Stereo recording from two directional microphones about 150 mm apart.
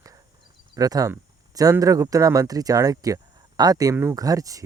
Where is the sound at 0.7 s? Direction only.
25° right (ahead or behind).